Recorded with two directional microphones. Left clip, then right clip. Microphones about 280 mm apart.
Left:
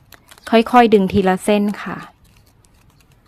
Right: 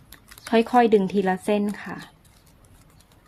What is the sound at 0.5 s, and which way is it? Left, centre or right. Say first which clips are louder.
Speech: left 6 dB; left.